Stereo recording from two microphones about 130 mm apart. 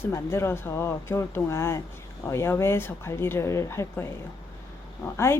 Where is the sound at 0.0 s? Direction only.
20° left (ahead or behind).